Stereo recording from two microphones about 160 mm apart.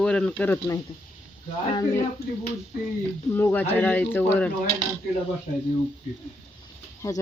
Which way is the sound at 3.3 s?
15° left (ahead or behind).